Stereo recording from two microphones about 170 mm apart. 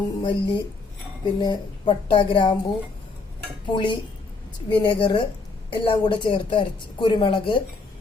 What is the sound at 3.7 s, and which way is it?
A woman's voice, 30° left (ahead or behind).